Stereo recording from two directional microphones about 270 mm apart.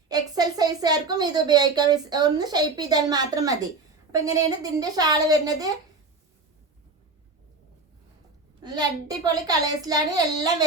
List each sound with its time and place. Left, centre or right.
0.1 s a woman's voice: centre
8.6 s a child's voice: centre